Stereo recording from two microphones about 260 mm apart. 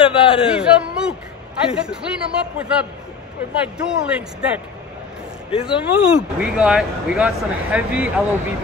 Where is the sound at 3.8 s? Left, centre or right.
Centre.